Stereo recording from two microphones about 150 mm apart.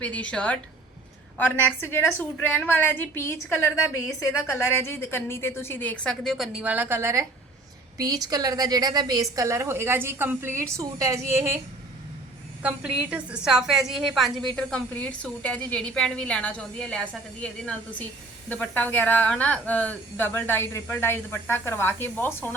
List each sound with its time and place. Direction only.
0.0 s a woman's voice: 10° left (ahead or behind); by 11.5 s 15° right (ahead or behind)
12.6 s a woman's voice: 5° right (ahead or behind); by 22.5 s 15° left (ahead or behind)